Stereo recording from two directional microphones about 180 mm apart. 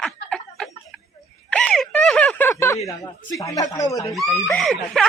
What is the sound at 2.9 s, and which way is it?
Speech, 20° left (ahead or behind).